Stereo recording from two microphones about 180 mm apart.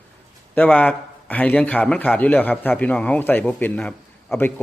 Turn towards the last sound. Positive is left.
turn(degrees=10)  # may be behind; listen again after turning